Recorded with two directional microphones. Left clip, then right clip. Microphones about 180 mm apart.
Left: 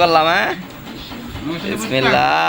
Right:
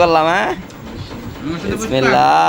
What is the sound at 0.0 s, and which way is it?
Speech, 25° right (ahead or behind).